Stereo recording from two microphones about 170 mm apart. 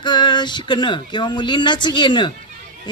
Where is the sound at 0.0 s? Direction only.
25° left (ahead or behind).